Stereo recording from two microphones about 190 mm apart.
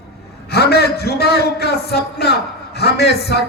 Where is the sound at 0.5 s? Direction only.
60° left (ahead or behind).